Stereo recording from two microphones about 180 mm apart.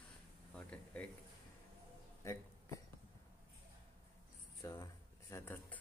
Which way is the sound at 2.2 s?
20° left (ahead or behind).